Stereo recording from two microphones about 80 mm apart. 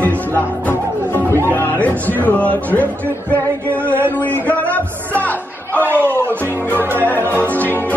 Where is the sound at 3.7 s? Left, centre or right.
Right.